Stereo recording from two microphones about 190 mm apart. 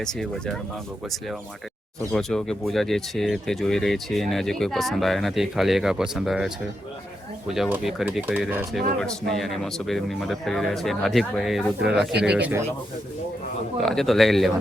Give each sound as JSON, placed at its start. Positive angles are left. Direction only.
{"t": 0.0, "sound": "speech", "side_deg": 5}
{"t": 2.1, "sound": "speech", "side_deg": 5}
{"t": 11.8, "sound": "speech", "side_deg": -60}
{"t": 12.2, "sound": "speech", "side_deg": -5}
{"t": 13.8, "sound": "speech", "side_deg": 0}